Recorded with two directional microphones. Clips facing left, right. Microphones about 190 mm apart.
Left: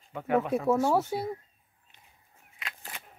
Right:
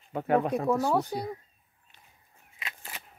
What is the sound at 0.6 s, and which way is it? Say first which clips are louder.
Speech: left 1 dB; 5° left (ahead or behind).